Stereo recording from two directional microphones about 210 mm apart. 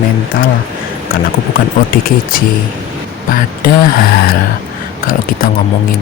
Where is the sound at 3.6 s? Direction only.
45° left (ahead or behind).